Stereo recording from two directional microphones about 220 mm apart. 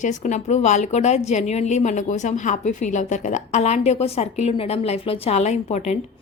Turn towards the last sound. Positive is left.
turn(degrees=30)  # may be behind; listen again after turning